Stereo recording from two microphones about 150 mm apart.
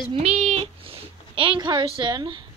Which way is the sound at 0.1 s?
45° right (ahead or behind).